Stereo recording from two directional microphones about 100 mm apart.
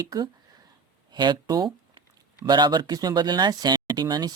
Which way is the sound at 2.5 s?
50° right (ahead or behind).